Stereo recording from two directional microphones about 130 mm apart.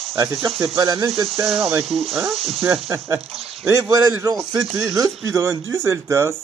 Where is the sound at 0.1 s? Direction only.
25° right (ahead or behind).